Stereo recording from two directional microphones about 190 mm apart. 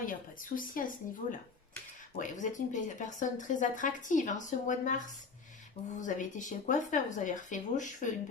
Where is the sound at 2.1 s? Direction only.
40° left (ahead or behind).